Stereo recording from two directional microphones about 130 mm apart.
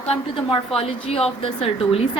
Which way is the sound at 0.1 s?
40° left (ahead or behind).